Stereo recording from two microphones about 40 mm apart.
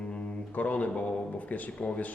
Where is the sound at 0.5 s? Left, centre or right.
Left.